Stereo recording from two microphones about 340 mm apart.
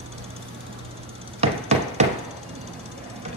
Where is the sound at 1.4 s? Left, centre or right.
Centre.